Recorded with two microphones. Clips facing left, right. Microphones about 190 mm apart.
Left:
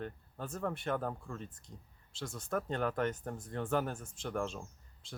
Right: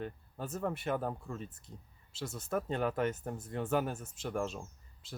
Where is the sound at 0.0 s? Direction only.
5° right (ahead or behind).